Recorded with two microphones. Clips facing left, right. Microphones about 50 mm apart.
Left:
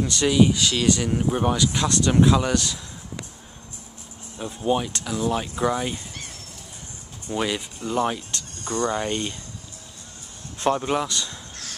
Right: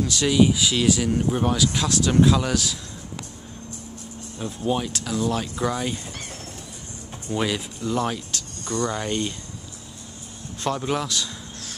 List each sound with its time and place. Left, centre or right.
0.0 s speech: centre
4.4 s speech: centre
5.1 s speech: centre
7.3 s speech: centre
7.8 s speech: centre
8.6 s speech: left
10.6 s speech: centre
10.9 s speech: centre